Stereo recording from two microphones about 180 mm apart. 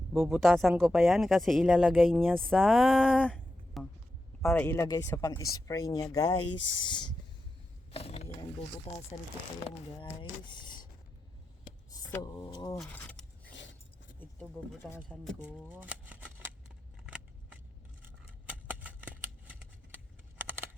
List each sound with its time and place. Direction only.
0.1 s speech: 10° right (ahead or behind)
0.3 s speech: centre (ahead or behind); by 7.1 s 25° left (ahead or behind)
7.9 s wild animals: 35° left (ahead or behind)
8.9 s speech: 40° left (ahead or behind)
10.0 s speech: 25° left (ahead or behind)
11.9 s speech: 20° left (ahead or behind)
12.7 s a sound: 5° left (ahead or behind)
13.5 s a sound: 85° left
14.2 s speech: 10° left (ahead or behind)
15.2 s speech: centre (ahead or behind)
15.7 s shuffling cards: 10° right (ahead or behind)
18.0 s scissors: 10° right (ahead or behind)